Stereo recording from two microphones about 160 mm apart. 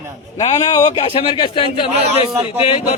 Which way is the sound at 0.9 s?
35° left (ahead or behind).